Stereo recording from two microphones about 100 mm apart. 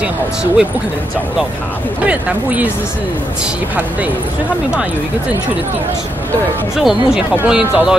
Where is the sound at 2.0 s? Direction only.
15° right (ahead or behind).